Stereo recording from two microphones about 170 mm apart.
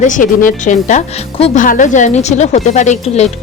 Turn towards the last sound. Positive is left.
turn(degrees=40)  # may be behind; listen again after turning